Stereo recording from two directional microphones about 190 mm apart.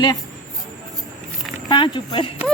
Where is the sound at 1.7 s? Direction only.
25° left (ahead or behind).